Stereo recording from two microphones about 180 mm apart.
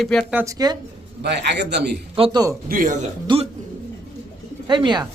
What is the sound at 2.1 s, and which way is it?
Speech, 25° right (ahead or behind).